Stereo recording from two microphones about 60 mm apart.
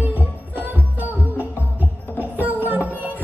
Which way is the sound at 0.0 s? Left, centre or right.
Right.